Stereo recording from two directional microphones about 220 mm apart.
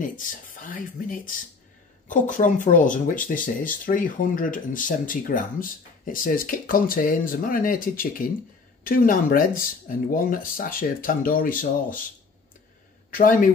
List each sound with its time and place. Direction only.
0.0 s speech: 40° left (ahead or behind)
13.1 s speech: 40° left (ahead or behind)